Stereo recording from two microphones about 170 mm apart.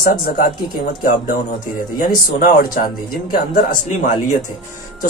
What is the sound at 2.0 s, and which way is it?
Speech, 55° left (ahead or behind).